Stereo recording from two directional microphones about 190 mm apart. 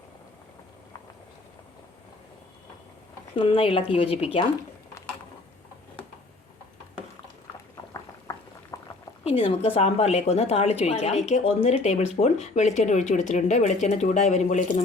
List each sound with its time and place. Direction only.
3.3 s speech: 30° left (ahead or behind)
8.7 s boiling: 15° left (ahead or behind)
9.2 s speech: 30° left (ahead or behind)